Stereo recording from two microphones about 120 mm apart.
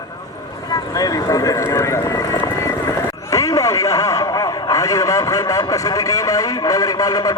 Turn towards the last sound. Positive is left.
turn(degrees=30)  # may be behind; listen again after turning